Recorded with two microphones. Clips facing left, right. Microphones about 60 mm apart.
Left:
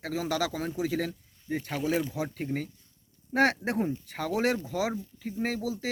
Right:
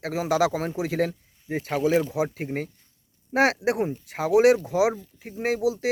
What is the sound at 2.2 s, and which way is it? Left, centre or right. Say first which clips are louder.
Speech: right 4 dB; right.